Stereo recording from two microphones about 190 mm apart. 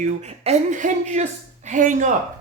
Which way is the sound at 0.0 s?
40° right (ahead or behind).